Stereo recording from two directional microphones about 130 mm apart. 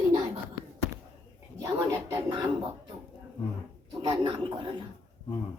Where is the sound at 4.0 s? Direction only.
40° right (ahead or behind).